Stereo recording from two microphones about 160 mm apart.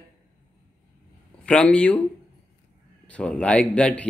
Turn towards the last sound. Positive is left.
turn(degrees=5)  # may be behind; listen again after turning